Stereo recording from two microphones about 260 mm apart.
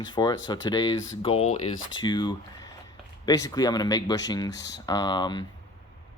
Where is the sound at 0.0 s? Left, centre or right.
Centre.